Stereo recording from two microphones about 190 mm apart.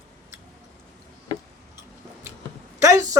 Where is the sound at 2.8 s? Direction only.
15° right (ahead or behind).